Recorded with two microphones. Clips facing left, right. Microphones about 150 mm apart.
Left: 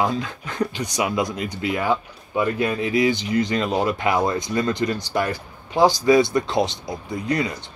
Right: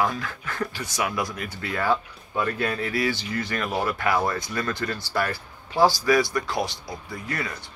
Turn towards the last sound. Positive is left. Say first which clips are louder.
# left 8 dB
turn(degrees=20)  # may be behind; listen again after turning